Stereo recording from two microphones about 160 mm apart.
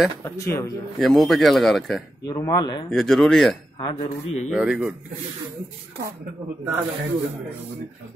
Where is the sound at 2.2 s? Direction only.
25° left (ahead or behind).